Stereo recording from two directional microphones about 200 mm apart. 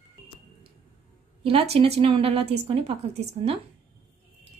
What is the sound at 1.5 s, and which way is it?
Speech, 30° right (ahead or behind).